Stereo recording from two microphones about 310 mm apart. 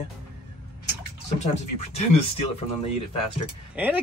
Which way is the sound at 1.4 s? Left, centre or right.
Left.